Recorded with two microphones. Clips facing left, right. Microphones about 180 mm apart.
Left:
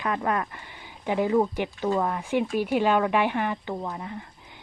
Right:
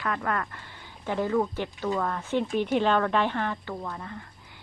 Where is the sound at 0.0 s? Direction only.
20° left (ahead or behind).